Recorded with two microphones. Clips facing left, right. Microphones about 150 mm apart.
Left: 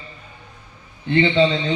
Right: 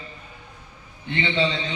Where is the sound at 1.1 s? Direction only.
40° left (ahead or behind).